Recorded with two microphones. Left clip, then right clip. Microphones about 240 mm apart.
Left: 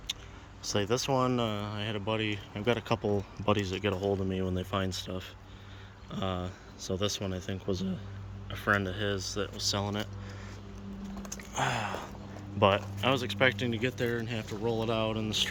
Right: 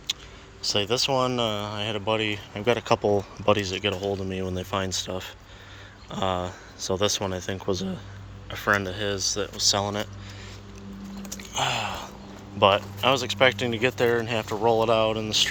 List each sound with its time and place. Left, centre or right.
0.6 s speech: centre
11.3 s a sound: centre
12.5 s speech: centre